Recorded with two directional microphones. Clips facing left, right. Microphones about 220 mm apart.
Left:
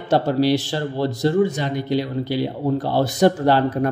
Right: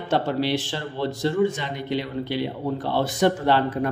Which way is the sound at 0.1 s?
40° left (ahead or behind).